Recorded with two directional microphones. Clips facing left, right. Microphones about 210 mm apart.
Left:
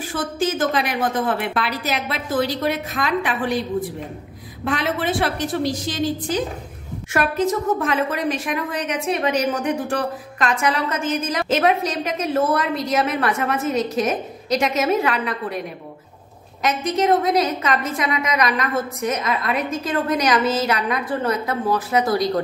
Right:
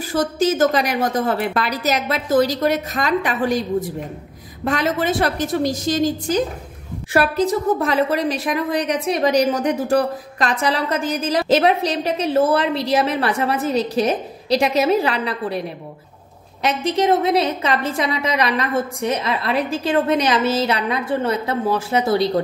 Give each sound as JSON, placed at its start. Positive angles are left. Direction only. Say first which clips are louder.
{"t": 0.1, "sound": "a woman's voice", "louder": "right 5 dB", "side_deg": -40}
{"t": 16.6, "sound": "a woman's voice", "louder": "right 1 dB", "side_deg": -30}